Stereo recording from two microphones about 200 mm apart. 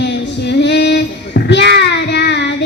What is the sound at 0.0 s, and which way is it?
Child singing, 60° left (ahead or behind).